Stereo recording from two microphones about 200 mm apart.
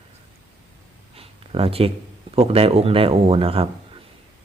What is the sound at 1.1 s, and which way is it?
A man's voice, 30° right (ahead or behind).